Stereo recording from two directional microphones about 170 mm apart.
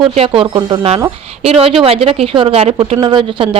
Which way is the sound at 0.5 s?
20° right (ahead or behind).